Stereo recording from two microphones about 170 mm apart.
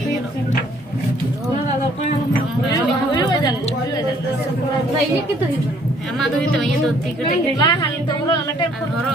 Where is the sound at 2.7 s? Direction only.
20° left (ahead or behind).